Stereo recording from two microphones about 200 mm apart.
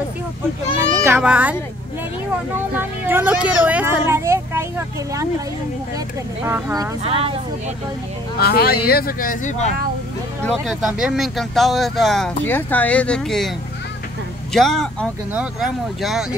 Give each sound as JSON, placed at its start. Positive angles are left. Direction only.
{"t": 1.0, "sound": "speech", "side_deg": -10}
{"t": 2.7, "sound": "speech", "side_deg": -10}
{"t": 6.4, "sound": "speech", "side_deg": -15}
{"t": 7.0, "sound": "speech", "side_deg": -30}
{"t": 8.4, "sound": "speech", "side_deg": 50}
{"t": 10.5, "sound": "speech", "side_deg": 0}
{"t": 14.5, "sound": "speech", "side_deg": 0}